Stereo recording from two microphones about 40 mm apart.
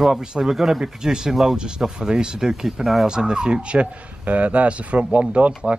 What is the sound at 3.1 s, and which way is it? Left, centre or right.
Speech, right.